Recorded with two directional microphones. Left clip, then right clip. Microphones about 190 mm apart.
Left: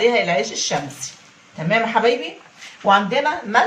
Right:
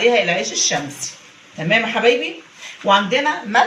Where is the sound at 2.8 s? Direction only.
30° left (ahead or behind).